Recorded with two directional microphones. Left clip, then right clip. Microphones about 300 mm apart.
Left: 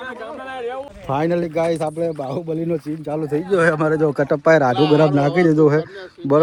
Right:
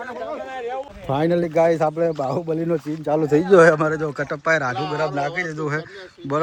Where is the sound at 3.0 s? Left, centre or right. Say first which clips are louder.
Right 6 dB; centre.